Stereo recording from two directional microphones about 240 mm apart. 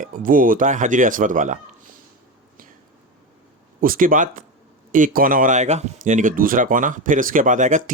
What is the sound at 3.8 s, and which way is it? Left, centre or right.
Speech, right.